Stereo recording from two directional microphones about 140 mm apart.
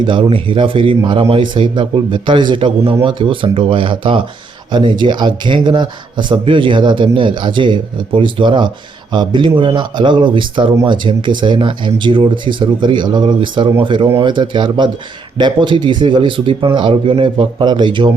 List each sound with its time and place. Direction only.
0.0 s speech: 40° right (ahead or behind)